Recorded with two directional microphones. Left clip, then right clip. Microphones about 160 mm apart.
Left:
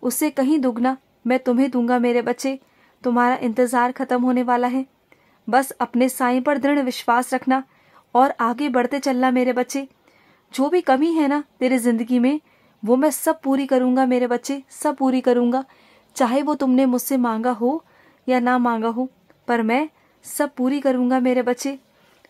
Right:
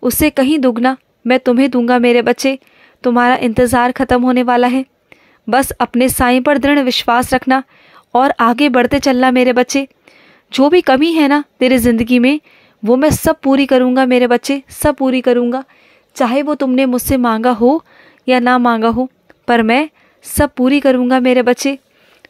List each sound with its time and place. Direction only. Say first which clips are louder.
0.0 s a woman's voice: right 8 dB; 25° right (ahead or behind)